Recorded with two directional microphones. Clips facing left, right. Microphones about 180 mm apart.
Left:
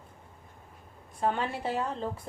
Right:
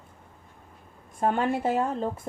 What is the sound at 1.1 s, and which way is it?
Speech, 50° right (ahead or behind).